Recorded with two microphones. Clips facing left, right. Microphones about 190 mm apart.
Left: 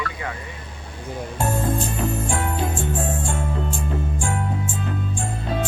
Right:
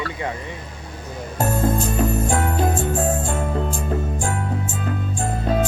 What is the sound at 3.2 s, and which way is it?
Music, 40° right (ahead or behind).